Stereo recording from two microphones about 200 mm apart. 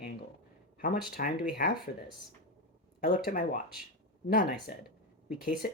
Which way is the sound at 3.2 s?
40° left (ahead or behind).